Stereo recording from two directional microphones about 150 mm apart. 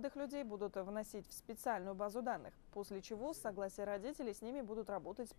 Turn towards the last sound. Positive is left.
turn(degrees=-30)  # may be behind; listen again after turning